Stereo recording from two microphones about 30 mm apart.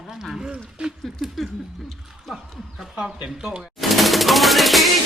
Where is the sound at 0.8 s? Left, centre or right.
Right.